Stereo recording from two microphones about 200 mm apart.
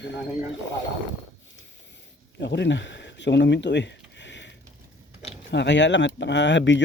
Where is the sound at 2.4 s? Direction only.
60° left (ahead or behind).